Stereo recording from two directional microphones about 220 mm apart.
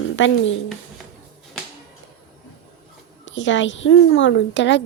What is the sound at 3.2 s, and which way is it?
Speech, 55° left (ahead or behind).